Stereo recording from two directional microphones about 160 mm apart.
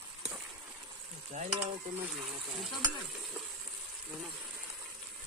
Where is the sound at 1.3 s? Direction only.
45° right (ahead or behind).